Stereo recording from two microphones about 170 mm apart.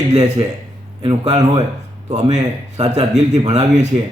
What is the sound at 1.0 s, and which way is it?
A man's voice, 35° right (ahead or behind).